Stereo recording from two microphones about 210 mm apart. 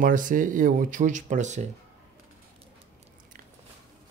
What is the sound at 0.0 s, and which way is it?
Speech, 40° right (ahead or behind).